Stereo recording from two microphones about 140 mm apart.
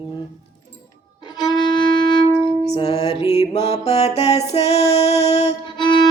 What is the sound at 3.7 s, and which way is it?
Female singing, 50° left (ahead or behind).